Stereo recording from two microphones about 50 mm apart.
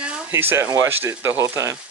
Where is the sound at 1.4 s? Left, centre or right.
Right.